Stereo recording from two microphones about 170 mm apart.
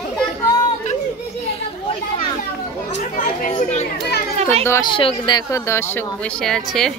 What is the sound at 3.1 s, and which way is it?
Speech, 50° left (ahead or behind).